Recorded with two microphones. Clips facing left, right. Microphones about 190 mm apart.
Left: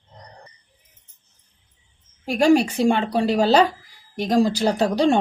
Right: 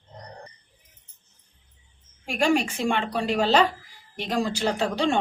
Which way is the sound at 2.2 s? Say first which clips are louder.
Left 6 dB; 40° left (ahead or behind).